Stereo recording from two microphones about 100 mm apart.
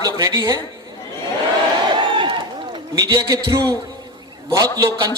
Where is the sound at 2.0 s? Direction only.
55° right (ahead or behind).